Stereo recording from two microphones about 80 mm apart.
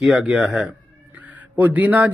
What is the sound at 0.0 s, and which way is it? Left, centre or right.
Speech, centre.